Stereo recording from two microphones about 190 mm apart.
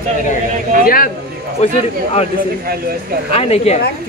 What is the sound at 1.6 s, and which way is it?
Speech, 35° left (ahead or behind).